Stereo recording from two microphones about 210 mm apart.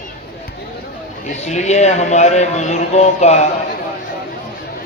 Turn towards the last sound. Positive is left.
turn(degrees=30)  # may be behind; listen again after turning